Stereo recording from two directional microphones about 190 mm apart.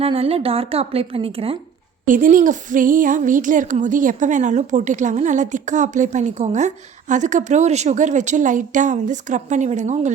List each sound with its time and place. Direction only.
0.0 s speech: 30° right (ahead or behind)
2.0 s speech: 45° right (ahead or behind)